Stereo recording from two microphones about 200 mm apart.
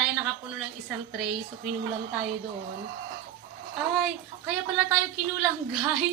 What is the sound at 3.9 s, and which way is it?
A woman's voice, centre (ahead or behind).